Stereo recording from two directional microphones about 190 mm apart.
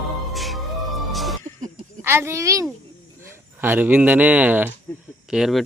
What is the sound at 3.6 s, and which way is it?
Speech, 10° right (ahead or behind).